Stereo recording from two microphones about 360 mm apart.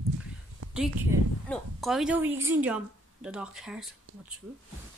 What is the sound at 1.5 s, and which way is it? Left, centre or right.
Speech, centre.